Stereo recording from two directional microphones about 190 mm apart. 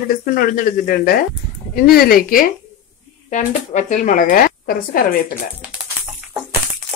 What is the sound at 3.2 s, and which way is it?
Speech, 40° left (ahead or behind).